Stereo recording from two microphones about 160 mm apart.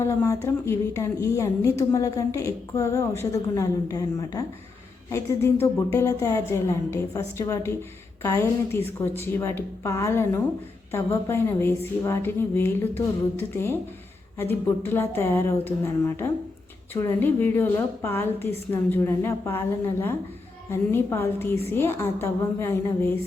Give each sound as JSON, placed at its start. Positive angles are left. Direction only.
{"t": 0.0, "sound": "a woman's voice", "side_deg": 20}
{"t": 14.8, "sound": "a woman's voice", "side_deg": 15}